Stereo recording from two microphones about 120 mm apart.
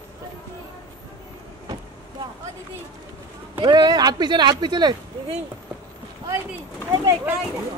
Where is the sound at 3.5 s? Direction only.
40° right (ahead or behind).